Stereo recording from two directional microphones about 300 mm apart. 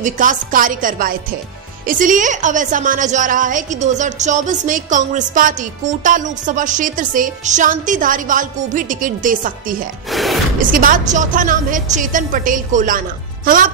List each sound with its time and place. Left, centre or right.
0.0 s a woman's voice: right
10.1 s a sound: centre
10.7 s a woman's voice: right